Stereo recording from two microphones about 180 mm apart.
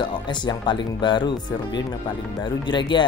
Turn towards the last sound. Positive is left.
turn(degrees=25)  # may be behind; listen again after turning